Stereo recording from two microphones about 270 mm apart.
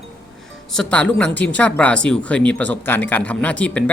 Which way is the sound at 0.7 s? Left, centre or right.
Centre.